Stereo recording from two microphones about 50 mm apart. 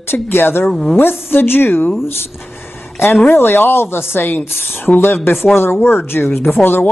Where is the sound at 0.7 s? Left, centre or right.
Centre.